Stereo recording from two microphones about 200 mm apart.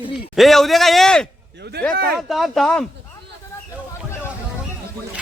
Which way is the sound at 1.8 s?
50° right (ahead or behind).